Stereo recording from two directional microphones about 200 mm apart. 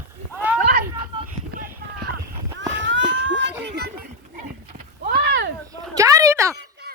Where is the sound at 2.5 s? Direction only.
65° right (ahead or behind).